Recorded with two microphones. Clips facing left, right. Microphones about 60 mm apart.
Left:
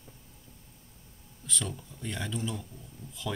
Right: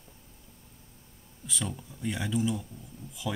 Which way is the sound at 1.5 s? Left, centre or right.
Centre.